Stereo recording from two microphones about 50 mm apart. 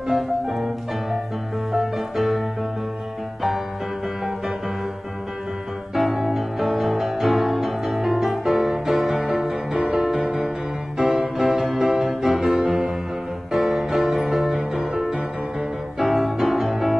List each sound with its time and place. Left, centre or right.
0.1 s music: centre
1.7 s music: centre
5.9 s music: centre